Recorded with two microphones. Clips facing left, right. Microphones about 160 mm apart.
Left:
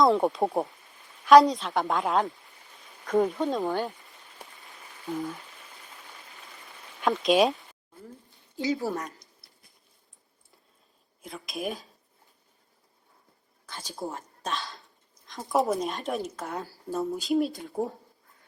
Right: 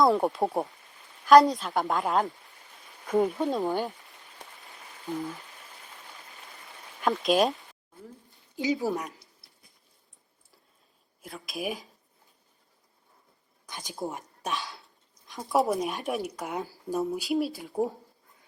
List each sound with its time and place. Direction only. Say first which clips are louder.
0.0 s a woman's voice: left 1 dB; centre (ahead or behind)
7.0 s a woman's voice: left 2 dB; centre (ahead or behind)
8.5 s speech: right 1 dB; 15° right (ahead or behind)
11.2 s a woman's voice: left 1 dB; centre (ahead or behind)
13.7 s a sound: even; 15° right (ahead or behind)
14.0 s speech: right 1 dB; 20° right (ahead or behind)
15.4 s a woman's voice: even; centre (ahead or behind); by 17.1 s 20° right (ahead or behind)
17.1 s a woman's voice: left 2 dB; 5° right (ahead or behind)